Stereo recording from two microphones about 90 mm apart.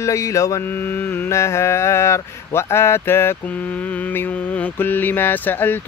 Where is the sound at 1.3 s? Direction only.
30° left (ahead or behind).